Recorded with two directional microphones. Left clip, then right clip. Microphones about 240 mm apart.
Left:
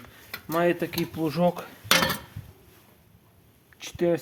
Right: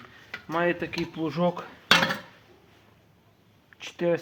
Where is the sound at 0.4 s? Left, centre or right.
Left; by 2.0 s centre.